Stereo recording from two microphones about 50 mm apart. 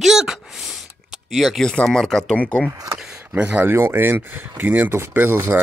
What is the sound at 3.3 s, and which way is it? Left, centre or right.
Speech, right.